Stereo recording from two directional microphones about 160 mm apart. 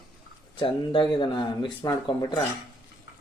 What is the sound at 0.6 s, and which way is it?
Speech, 30° left (ahead or behind).